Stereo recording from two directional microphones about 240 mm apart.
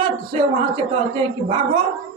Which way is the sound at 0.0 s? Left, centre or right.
Right.